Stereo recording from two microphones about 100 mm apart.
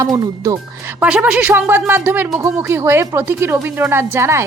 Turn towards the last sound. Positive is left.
turn(degrees=-25)  # may be behind; listen again after turning